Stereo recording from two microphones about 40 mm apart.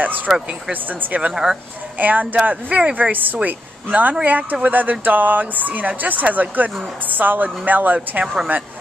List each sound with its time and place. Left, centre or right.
0.3 s speech: centre
0.7 s speech: right
1.3 s speech: centre
2.0 s a woman's voice: right